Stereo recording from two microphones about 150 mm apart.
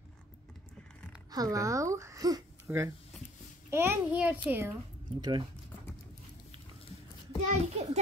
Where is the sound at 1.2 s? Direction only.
25° right (ahead or behind).